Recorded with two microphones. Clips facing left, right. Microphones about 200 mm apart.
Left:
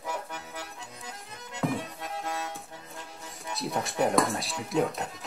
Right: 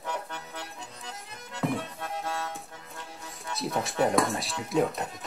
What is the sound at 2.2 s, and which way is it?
Music, 20° left (ahead or behind).